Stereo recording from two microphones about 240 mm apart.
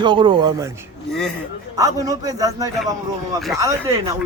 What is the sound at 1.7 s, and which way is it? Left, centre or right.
Speech, centre.